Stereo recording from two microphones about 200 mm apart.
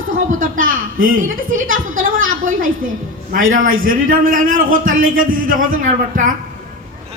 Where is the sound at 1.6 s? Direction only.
80° right.